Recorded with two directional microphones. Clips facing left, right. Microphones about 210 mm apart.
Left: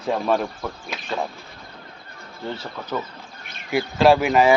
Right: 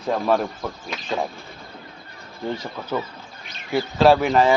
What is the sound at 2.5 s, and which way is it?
Speech, 10° right (ahead or behind).